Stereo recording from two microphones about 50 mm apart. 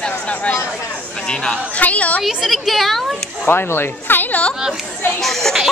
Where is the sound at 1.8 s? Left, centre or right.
Left.